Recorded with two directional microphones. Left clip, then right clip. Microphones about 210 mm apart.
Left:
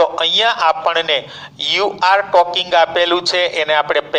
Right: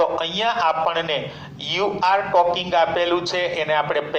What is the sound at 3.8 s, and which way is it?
Speech, 25° left (ahead or behind).